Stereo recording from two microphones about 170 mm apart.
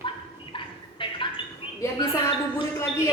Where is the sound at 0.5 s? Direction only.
30° left (ahead or behind).